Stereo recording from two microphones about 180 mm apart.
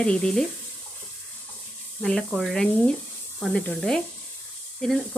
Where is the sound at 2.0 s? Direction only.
5° left (ahead or behind).